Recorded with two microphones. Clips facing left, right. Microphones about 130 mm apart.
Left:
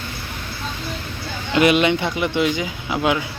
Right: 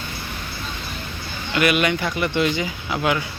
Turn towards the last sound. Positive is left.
turn(degrees=10)  # may be behind; listen again after turning